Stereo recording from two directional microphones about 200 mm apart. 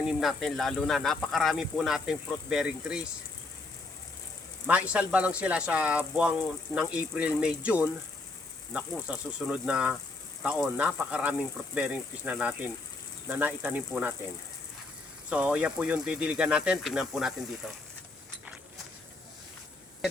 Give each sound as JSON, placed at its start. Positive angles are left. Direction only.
{"t": 0.1, "sound": "speech", "side_deg": 0}
{"t": 4.6, "sound": "speech", "side_deg": -5}
{"t": 15.3, "sound": "speech", "side_deg": -5}